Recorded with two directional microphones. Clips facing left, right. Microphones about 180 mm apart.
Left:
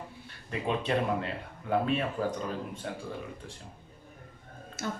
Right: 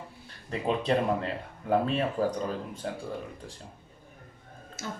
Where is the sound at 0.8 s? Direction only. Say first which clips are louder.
Right 3 dB; 35° right (ahead or behind).